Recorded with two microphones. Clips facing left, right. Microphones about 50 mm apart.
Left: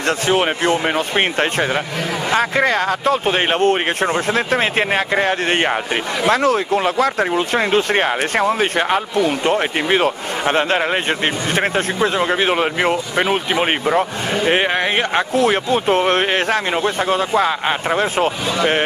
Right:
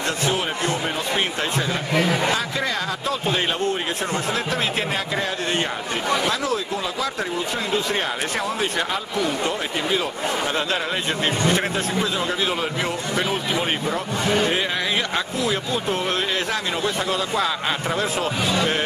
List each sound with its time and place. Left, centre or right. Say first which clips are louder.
0.3 s speech: left 10 dB; left